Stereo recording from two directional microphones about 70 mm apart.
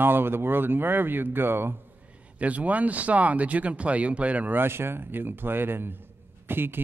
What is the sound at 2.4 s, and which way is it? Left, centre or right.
A man's voice, right.